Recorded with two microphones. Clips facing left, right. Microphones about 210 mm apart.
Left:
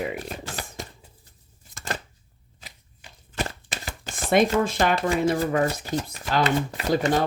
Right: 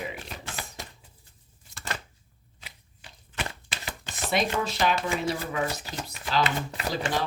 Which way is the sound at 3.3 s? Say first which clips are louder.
Left 5 dB; 40° left (ahead or behind).